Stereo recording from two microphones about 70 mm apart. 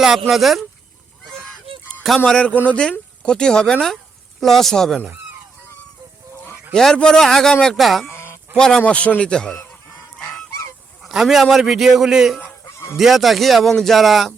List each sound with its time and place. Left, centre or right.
0.0 s a man's voice: centre
1.2 s goose: centre
2.2 s a man's voice: centre
6.7 s a man's voice: centre
8.1 s a sound: left
8.5 s speech: centre
11.0 s a man's voice: centre
12.6 s goose: left
13.0 s a man's voice: centre